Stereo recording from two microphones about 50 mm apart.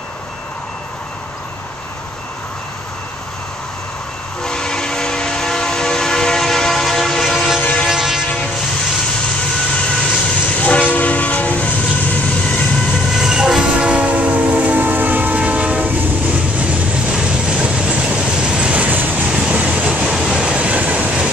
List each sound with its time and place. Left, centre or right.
4.4 s train: centre
7.9 s train: centre
9.8 s train: left
12.4 s vehicle: left
13.1 s train: centre
13.7 s train: right
19.2 s vehicle: centre
19.6 s vehicle: right
20.1 s train: centre
20.4 s train: right